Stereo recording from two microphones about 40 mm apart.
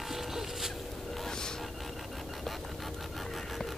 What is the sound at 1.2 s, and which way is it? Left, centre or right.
Vehicle, centre.